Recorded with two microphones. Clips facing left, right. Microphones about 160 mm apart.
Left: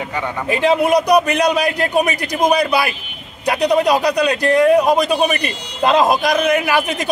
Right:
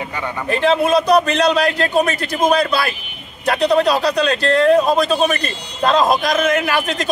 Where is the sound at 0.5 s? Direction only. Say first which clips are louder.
Left 1 dB; 15° left (ahead or behind).